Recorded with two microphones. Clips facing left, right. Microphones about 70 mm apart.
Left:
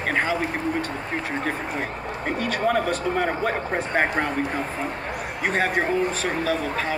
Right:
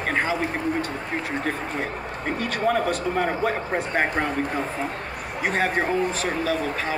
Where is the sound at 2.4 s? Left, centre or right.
Centre.